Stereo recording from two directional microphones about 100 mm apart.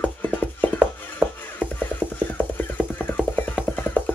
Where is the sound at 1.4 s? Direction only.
20° left (ahead or behind).